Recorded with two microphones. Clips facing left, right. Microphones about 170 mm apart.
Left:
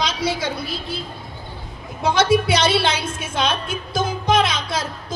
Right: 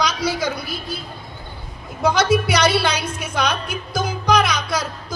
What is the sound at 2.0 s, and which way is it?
Speech, 25° left (ahead or behind).